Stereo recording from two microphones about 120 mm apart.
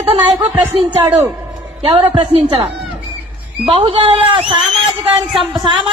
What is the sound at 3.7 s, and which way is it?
A woman's voice, 50° right (ahead or behind).